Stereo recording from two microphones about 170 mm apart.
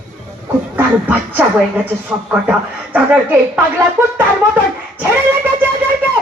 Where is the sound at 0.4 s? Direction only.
10° right (ahead or behind).